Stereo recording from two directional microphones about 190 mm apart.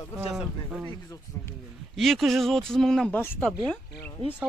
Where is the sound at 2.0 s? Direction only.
Centre (ahead or behind).